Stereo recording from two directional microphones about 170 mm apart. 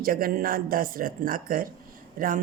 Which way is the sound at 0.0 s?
55° right (ahead or behind).